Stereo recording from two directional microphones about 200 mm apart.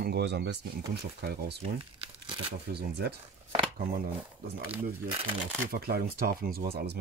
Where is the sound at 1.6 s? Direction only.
25° right (ahead or behind).